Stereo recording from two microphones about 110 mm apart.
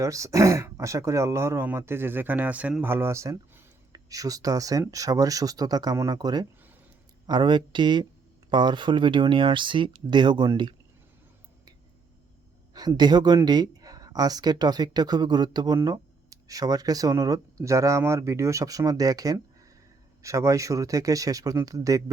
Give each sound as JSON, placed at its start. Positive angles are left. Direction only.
{"t": 0.0, "sound": "speech", "side_deg": -30}
{"t": 12.7, "sound": "speech", "side_deg": -35}